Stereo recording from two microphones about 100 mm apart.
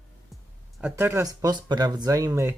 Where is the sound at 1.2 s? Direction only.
40° right (ahead or behind).